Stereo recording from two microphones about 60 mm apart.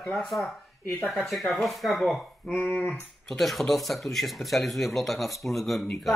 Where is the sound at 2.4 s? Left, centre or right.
Left.